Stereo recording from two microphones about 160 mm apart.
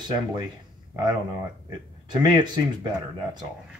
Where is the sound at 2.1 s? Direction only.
30° right (ahead or behind).